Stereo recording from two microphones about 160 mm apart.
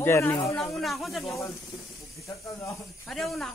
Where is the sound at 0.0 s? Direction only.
15° left (ahead or behind).